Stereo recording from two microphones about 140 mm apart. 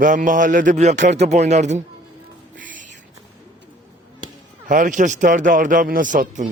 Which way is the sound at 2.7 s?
70° right (ahead or behind).